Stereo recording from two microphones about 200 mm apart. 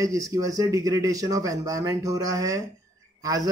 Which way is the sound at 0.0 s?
15° right (ahead or behind).